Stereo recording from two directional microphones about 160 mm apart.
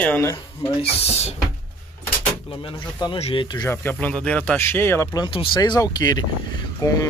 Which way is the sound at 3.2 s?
40° left (ahead or behind).